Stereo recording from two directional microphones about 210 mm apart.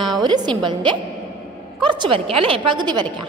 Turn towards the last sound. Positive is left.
turn(degrees=-20)  # may be behind; listen again after turning